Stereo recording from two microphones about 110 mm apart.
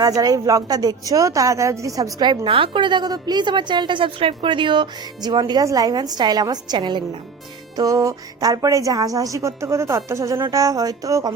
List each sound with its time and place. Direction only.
0.0 s a woman's voice: 35° right (ahead or behind)
7.8 s a woman's voice: 30° right (ahead or behind)